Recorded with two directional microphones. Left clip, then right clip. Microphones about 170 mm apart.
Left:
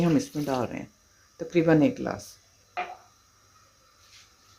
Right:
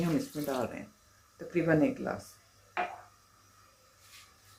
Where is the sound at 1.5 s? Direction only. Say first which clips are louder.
Left 6 dB; 75° left (ahead or behind).